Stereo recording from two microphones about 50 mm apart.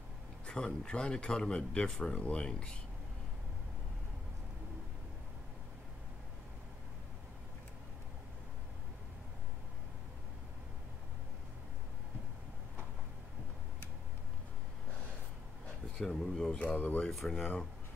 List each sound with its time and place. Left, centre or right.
0.5 s speech: centre
16.0 s speech: centre
16.5 s speech: left
17.1 s speech: centre
17.4 s speech: centre